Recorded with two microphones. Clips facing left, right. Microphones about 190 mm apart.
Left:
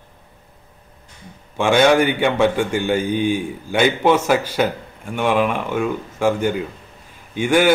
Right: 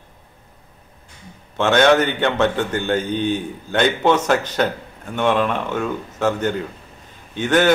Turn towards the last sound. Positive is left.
turn(degrees=10)  # may be behind; listen again after turning